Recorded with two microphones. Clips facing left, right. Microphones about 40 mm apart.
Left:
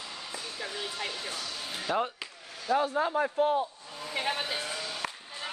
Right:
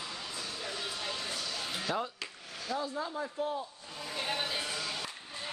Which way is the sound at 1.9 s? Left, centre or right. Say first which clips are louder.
Left 5 dB; centre.